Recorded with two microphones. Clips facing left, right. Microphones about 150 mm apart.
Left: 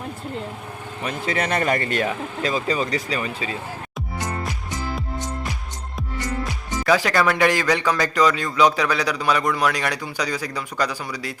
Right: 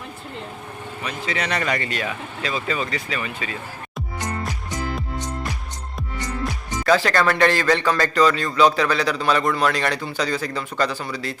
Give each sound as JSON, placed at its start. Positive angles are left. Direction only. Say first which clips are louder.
{"t": 1.0, "sound": "speech", "louder": "left 3 dB", "side_deg": 50}
{"t": 6.8, "sound": "a man's voice", "louder": "right 1 dB", "side_deg": 10}